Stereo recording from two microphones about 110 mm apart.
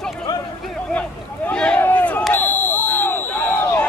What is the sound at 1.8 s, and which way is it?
Crowd, 15° left (ahead or behind).